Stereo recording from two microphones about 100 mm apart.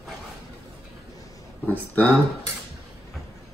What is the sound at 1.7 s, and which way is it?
Speech, 10° left (ahead or behind).